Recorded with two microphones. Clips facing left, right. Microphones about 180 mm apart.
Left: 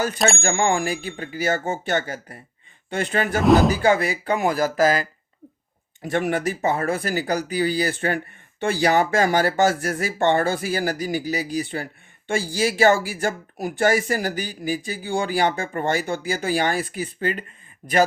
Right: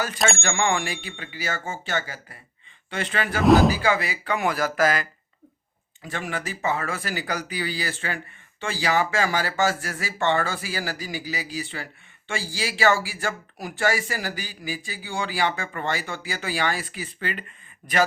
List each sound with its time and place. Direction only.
0.3 s speech: 40° left (ahead or behind)
3.0 s speech: 40° left (ahead or behind)
3.4 s speech: centre (ahead or behind)
3.8 s speech: 50° left (ahead or behind)
6.0 s speech: 60° left (ahead or behind); by 18.0 s 35° left (ahead or behind)